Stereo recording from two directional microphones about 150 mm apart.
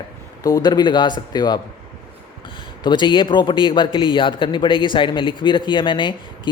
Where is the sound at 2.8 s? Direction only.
30° left (ahead or behind).